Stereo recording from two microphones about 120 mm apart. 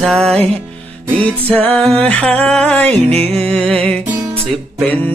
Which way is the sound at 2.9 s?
60° right (ahead or behind).